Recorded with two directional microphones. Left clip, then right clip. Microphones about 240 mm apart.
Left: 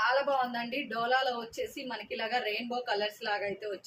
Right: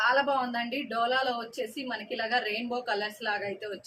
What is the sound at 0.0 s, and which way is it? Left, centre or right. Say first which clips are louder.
A woman's voice: right 2 dB; centre.